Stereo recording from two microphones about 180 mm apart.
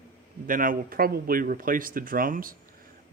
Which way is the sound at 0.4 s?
50° right (ahead or behind).